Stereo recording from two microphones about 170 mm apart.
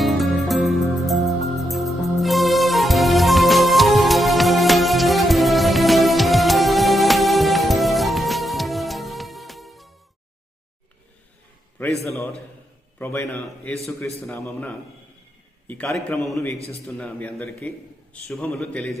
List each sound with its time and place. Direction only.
0.0 s music: centre (ahead or behind)
13.0 s a man's voice: 15° left (ahead or behind)